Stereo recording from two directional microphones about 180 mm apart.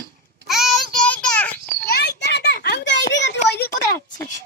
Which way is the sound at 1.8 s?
65° left (ahead or behind).